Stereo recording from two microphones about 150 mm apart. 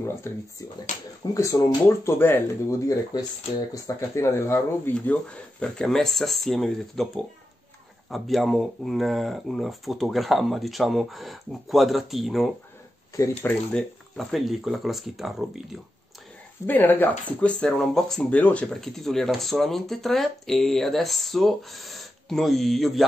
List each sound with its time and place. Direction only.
0.0 s speech: 15° left (ahead or behind); by 7.1 s centre (ahead or behind)
8.1 s speech: centre (ahead or behind)
16.6 s speech: 15° left (ahead or behind)